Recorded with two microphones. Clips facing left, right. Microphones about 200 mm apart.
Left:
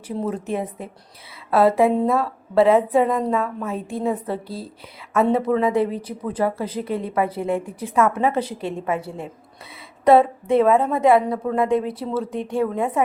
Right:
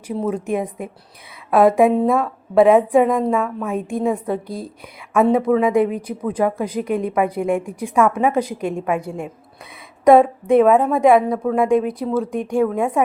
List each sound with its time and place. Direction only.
0.3 s a woman's voice: 10° right (ahead or behind)